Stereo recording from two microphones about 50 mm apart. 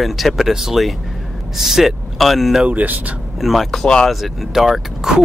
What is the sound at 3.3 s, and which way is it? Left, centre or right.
Speech, centre.